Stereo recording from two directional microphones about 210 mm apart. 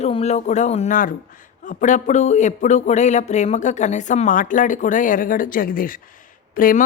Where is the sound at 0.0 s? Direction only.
30° left (ahead or behind).